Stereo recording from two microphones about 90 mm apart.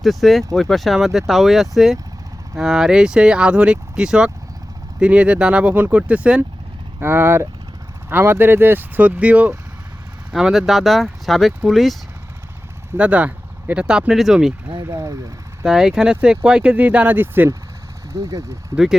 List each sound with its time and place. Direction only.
0.0 s speech: centre (ahead or behind)
7.0 s speech: 25° right (ahead or behind)
10.3 s speech: 5° right (ahead or behind)
13.0 s speech: 15° right (ahead or behind)
14.8 s speech: 35° right (ahead or behind)
15.6 s speech: 5° right (ahead or behind); by 17.6 s 25° right (ahead or behind)
18.1 s speech: 35° right (ahead or behind)